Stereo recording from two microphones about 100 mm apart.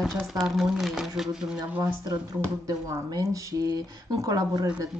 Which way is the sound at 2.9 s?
35° right (ahead or behind).